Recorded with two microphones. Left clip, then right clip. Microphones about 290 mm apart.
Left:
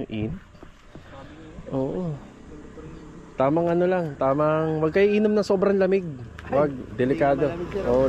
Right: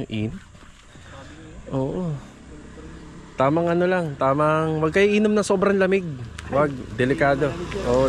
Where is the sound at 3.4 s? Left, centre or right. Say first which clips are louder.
Right 1 dB; centre.